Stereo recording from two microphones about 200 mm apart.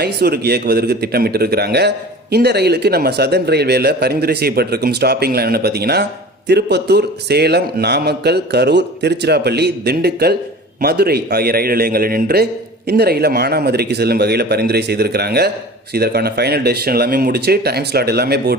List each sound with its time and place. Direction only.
0.0 s a man's voice: 55° right (ahead or behind)